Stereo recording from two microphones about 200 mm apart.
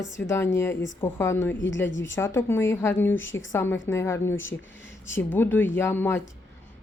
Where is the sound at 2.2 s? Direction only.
15° left (ahead or behind).